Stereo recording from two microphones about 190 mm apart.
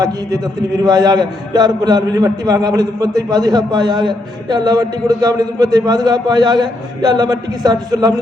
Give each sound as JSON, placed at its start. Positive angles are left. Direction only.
{"t": 0.9, "sound": "a man's voice", "side_deg": -20}